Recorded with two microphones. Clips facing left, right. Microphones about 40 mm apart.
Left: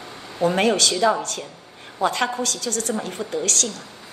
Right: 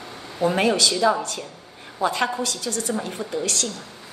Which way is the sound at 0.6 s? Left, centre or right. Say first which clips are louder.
Even; left.